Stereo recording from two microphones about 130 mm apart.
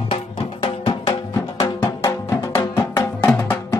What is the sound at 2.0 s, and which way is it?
Music, 25° left (ahead or behind).